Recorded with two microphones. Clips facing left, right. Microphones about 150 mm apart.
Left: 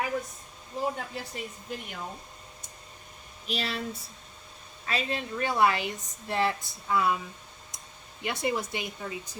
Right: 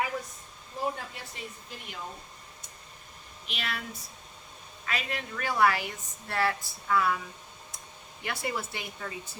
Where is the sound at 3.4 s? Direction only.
35° left (ahead or behind).